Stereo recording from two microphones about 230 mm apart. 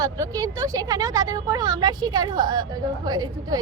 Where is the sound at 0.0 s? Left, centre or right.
Centre.